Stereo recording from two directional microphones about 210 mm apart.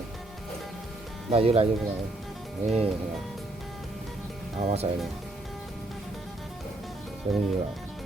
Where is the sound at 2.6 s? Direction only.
30° right (ahead or behind).